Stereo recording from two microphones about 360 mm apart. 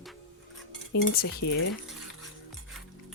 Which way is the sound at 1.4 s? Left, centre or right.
Left.